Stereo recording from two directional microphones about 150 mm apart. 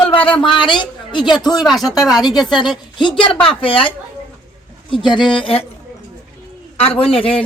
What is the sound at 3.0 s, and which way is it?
Speech, 35° left (ahead or behind).